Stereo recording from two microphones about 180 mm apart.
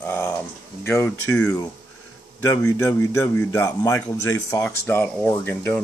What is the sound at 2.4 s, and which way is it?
Speech, 15° left (ahead or behind).